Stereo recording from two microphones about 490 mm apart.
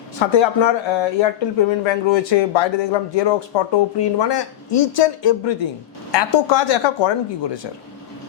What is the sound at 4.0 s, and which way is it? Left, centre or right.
Speech, left.